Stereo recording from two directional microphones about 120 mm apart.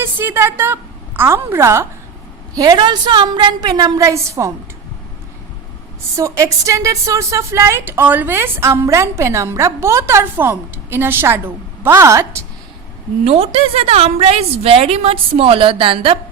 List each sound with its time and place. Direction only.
0.0 s a woman's voice: 20° right (ahead or behind)
2.6 s a woman's voice: 35° right (ahead or behind)
6.1 s speech: 25° right (ahead or behind)
13.2 s a woman's voice: 55° right (ahead or behind)